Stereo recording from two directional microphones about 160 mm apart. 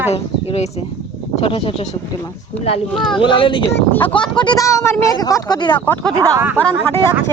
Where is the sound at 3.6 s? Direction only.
10° left (ahead or behind).